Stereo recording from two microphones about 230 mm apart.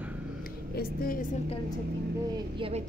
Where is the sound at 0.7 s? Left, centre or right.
Left.